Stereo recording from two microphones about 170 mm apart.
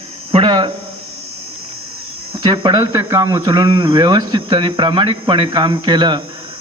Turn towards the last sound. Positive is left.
turn(degrees=-25)  # may be behind; listen again after turning